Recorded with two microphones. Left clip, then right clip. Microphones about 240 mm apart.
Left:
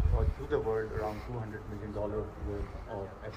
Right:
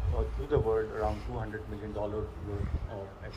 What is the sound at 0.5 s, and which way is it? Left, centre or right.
Speech, right.